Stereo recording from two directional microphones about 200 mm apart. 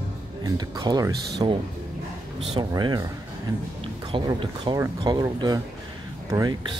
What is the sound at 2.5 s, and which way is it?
Speech, 20° right (ahead or behind).